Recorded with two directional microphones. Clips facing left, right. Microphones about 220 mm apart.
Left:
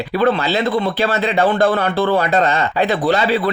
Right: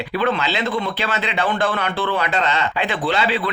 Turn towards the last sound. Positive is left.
turn(degrees=40)  # may be behind; listen again after turning